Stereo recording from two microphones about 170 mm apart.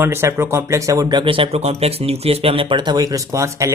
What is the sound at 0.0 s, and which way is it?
Speech, 15° right (ahead or behind).